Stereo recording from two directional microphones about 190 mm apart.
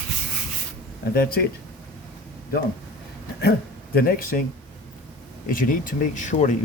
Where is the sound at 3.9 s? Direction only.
50° left (ahead or behind).